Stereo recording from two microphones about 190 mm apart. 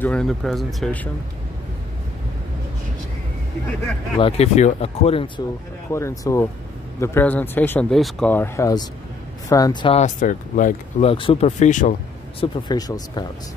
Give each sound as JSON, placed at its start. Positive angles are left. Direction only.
{"t": 0.0, "sound": "speech", "side_deg": 5}
{"t": 4.2, "sound": "speech", "side_deg": 35}
{"t": 5.9, "sound": "speech", "side_deg": 15}
{"t": 9.9, "sound": "speech", "side_deg": 40}
{"t": 11.1, "sound": "speech", "side_deg": 30}
{"t": 12.4, "sound": "speech", "side_deg": 20}